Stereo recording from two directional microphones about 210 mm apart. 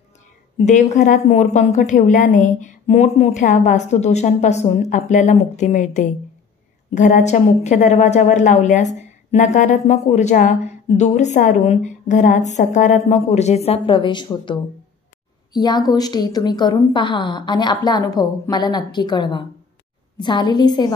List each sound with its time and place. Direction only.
0.6 s a woman's voice: 35° left (ahead or behind)